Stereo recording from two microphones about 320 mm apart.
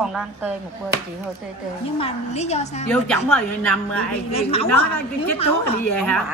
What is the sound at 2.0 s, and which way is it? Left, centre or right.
Speech, centre.